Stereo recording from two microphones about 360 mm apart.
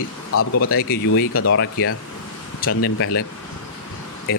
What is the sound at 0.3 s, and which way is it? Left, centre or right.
Speech, left.